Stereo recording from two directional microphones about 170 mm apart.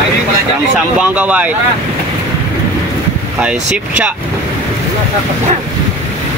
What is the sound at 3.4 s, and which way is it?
Speech, 5° right (ahead or behind).